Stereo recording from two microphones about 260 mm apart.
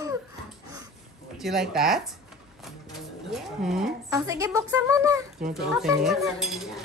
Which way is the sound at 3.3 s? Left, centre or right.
Centre.